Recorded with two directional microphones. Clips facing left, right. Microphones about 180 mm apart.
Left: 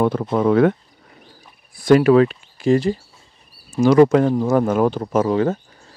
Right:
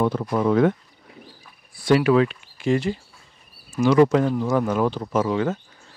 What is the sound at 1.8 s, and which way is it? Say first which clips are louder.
Speech: left 5 dB; 45° left (ahead or behind).